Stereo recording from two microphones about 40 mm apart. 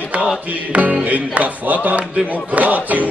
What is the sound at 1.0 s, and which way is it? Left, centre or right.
Music, right.